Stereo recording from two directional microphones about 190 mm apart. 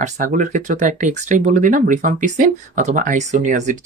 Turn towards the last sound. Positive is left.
turn(degrees=-40)  # may be behind; listen again after turning